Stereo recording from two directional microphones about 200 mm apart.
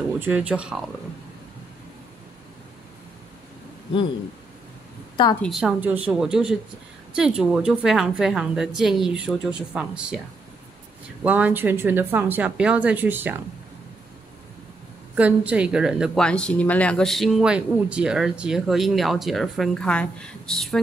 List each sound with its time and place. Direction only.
0.2 s speech: 5° right (ahead or behind)
5.1 s a woman's voice: 25° left (ahead or behind)
5.4 s speech: centre (ahead or behind)
11.2 s a woman's voice: 10° right (ahead or behind)
15.1 s speech: 5° right (ahead or behind)